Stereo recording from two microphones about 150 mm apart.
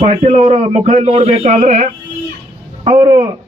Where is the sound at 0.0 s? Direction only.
45° right (ahead or behind).